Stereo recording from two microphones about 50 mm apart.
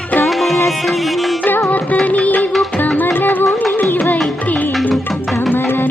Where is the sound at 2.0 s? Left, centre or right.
Left.